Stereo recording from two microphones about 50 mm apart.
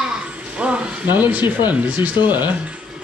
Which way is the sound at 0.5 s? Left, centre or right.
Right.